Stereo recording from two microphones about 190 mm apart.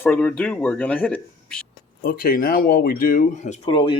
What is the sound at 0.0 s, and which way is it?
Speech, 10° left (ahead or behind).